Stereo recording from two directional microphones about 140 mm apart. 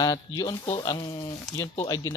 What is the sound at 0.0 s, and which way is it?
Speech, 30° left (ahead or behind).